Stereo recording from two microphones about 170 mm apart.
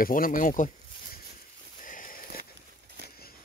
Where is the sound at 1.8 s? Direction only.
50° left (ahead or behind).